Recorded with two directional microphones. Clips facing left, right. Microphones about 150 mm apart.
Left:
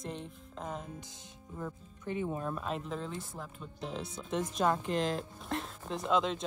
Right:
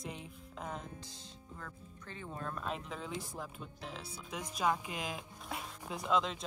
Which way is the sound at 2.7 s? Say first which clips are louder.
Left 4 dB; centre (ahead or behind).